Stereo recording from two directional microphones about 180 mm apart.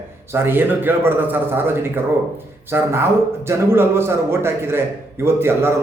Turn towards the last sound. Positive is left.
turn(degrees=-15)  # may be behind; listen again after turning